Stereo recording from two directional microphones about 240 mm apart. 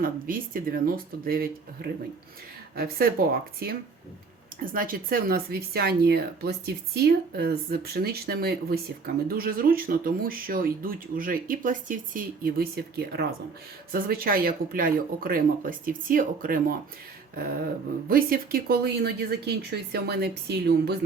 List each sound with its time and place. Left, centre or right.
0.0 s speech: right
18.1 s speech: right